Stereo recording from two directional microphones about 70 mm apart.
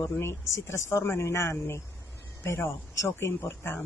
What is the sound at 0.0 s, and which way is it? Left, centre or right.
Speech, left.